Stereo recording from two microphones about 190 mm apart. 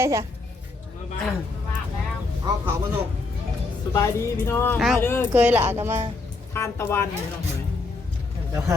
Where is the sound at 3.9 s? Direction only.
15° left (ahead or behind).